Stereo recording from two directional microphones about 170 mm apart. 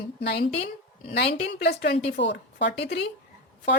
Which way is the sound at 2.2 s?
85° left.